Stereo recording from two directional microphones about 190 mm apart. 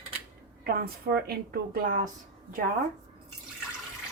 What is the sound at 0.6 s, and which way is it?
Speech, 55° right (ahead or behind).